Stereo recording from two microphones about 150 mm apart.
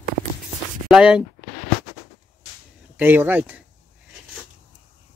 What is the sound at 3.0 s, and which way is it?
Speech, 10° right (ahead or behind).